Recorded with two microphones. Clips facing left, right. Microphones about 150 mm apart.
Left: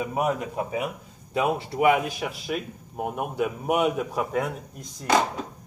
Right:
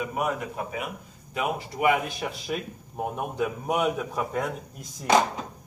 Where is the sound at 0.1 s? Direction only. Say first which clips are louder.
Left 3 dB; 25° left (ahead or behind).